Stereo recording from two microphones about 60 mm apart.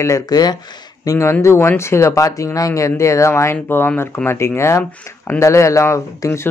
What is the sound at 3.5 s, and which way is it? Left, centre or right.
Speech, left.